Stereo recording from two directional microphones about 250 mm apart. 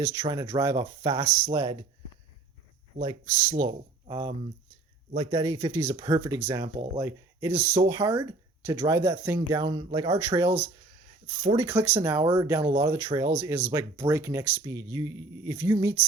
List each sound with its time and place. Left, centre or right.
0.1 s speech: centre
3.0 s speech: centre
11.4 s speech: centre